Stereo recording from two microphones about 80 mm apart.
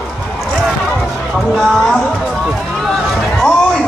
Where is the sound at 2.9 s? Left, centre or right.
Centre.